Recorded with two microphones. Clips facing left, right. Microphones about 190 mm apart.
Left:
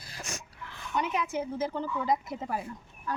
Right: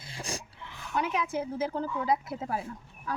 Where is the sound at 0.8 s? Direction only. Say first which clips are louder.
Even; 5° right (ahead or behind).